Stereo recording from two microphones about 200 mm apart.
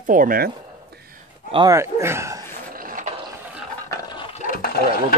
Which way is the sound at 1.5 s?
20° right (ahead or behind).